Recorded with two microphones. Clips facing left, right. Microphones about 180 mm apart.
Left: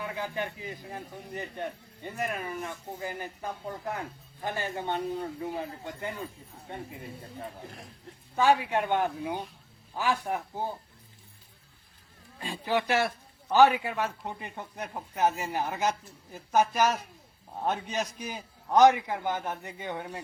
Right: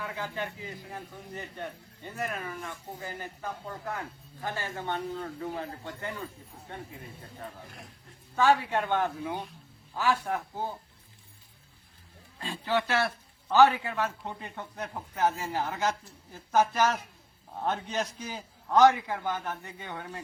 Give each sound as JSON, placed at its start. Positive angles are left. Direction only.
{"t": 0.2, "sound": "a man's voice", "side_deg": 15}
{"t": 8.4, "sound": "a man's voice", "side_deg": 15}
{"t": 12.4, "sound": "a man's voice", "side_deg": 15}